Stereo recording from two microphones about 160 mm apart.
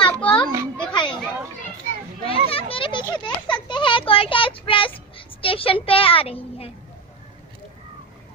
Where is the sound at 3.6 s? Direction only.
30° left (ahead or behind).